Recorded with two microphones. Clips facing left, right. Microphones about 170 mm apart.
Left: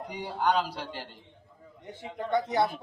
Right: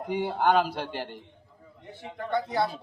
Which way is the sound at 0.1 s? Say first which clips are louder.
Right 4 dB; 50° right (ahead or behind).